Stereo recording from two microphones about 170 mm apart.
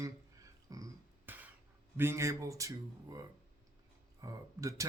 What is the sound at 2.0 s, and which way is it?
Speech, 15° right (ahead or behind).